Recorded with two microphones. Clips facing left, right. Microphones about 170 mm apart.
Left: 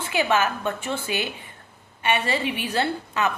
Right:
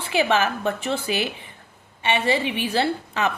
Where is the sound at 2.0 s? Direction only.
25° right (ahead or behind).